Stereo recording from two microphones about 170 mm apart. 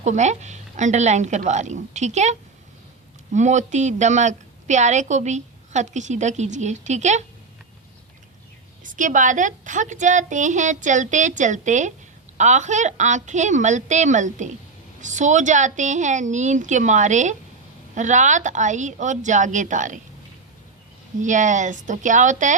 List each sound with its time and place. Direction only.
0.0 s a woman's voice: 45° right (ahead or behind)
3.3 s a woman's voice: 45° right (ahead or behind)
8.8 s a woman's voice: 50° right (ahead or behind)
21.2 s a woman's voice: 45° right (ahead or behind)